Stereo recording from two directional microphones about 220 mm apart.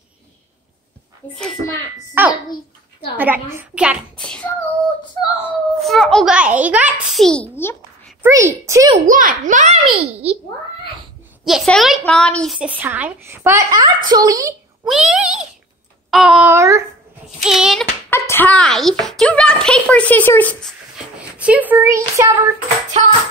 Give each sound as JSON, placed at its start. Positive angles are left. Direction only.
{"t": 1.3, "sound": "a child's voice", "side_deg": 0}
{"t": 2.2, "sound": "a woman's voice", "side_deg": -10}
{"t": 8.2, "sound": "a woman's voice", "side_deg": -10}
{"t": 8.9, "sound": "a child's voice", "side_deg": -35}
{"t": 11.4, "sound": "a woman's voice", "side_deg": 0}
{"t": 14.9, "sound": "a child's voice", "side_deg": -5}
{"t": 17.4, "sound": "a child's voice", "side_deg": 0}
{"t": 18.1, "sound": "a child's voice", "side_deg": 10}
{"t": 21.4, "sound": "a woman's voice", "side_deg": -5}